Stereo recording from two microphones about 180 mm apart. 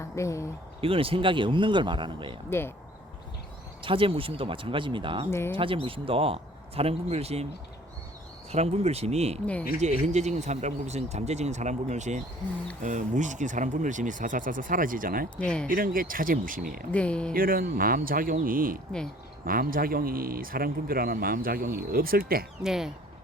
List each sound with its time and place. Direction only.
0.0 s speech: 15° left (ahead or behind)
0.8 s speech: 30° right (ahead or behind)
2.5 s speech: 10° left (ahead or behind)
3.8 s speech: 30° right (ahead or behind)
5.3 s speech: 15° left (ahead or behind)
5.5 s speech: 30° right (ahead or behind)
8.5 s speech: 35° right (ahead or behind); by 15.3 s 50° right (ahead or behind)
15.4 s speech: 5° left (ahead or behind)
15.6 s speech: 50° right (ahead or behind)
16.9 s speech: 5° left (ahead or behind)
17.3 s speech: 55° right (ahead or behind)
22.6 s speech: 5° right (ahead or behind)